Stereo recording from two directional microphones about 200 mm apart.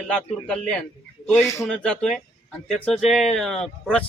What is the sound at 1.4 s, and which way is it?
Speech, 15° left (ahead or behind).